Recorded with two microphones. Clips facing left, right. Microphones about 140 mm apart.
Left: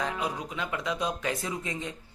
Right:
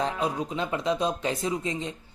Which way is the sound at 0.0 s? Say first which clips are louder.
Right 4 dB; 25° right (ahead or behind).